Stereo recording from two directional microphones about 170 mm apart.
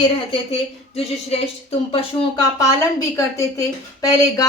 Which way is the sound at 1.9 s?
35° left (ahead or behind).